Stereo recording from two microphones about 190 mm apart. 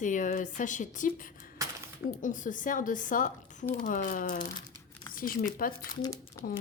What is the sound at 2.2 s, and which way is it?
A woman's voice, 45° left (ahead or behind).